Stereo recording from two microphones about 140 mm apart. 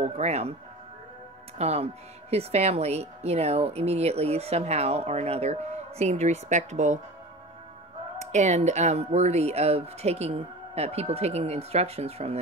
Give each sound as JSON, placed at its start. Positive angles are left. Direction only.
{"t": 0.0, "sound": "speech", "side_deg": -50}
{"t": 1.6, "sound": "speech", "side_deg": -50}
{"t": 8.2, "sound": "speech", "side_deg": -55}